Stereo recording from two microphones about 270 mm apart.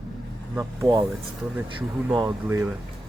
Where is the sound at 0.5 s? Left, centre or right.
Centre.